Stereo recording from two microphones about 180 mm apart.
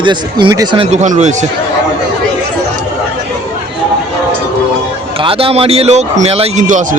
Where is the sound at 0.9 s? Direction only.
40° right (ahead or behind).